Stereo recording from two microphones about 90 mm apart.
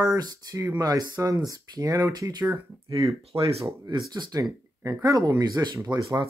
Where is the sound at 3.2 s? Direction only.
90° right.